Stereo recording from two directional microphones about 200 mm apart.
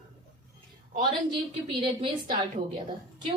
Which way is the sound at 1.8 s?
25° right (ahead or behind).